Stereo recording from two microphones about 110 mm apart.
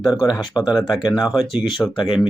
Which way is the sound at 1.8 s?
15° left (ahead or behind).